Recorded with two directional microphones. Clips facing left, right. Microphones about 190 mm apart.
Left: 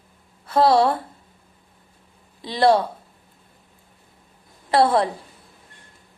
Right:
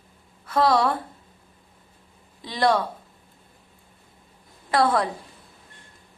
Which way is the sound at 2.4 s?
30° left (ahead or behind).